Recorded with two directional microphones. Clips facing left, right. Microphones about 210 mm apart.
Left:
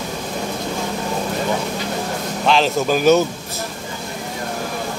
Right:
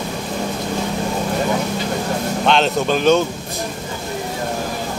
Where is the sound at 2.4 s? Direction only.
Centre (ahead or behind).